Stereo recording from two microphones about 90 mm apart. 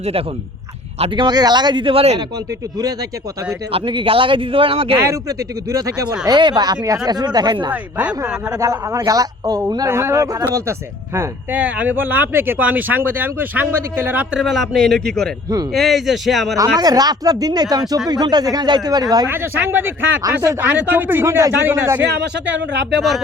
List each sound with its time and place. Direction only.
1.1 s speech: 55° right (ahead or behind); by 2.0 s 80° right
3.7 s a man's voice: 80° right
4.9 s speech: 35° right (ahead or behind)
6.3 s speech: 55° right (ahead or behind)
7.7 s speech: 15° right (ahead or behind)
8.5 s speech: 35° right (ahead or behind)
11.5 s speech: 15° right (ahead or behind)
14.3 s a man's voice: centre (ahead or behind)
16.7 s speech: 45° right (ahead or behind)
19.3 s speech: 20° right (ahead or behind)
23.0 s a man's voice: centre (ahead or behind)